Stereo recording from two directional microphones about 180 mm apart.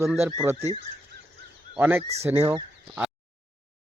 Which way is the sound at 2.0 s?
35° right (ahead or behind).